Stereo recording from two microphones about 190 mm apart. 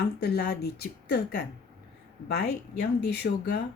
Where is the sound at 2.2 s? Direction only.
60° left (ahead or behind).